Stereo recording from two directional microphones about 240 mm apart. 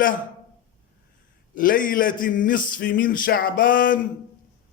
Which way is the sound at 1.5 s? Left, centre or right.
Left.